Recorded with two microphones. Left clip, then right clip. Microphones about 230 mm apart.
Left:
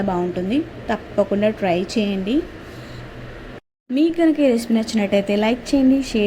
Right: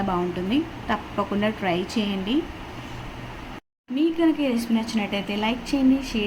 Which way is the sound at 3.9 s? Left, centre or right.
Left.